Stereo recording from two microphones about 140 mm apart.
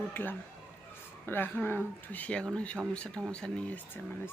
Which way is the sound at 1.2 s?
15° left (ahead or behind).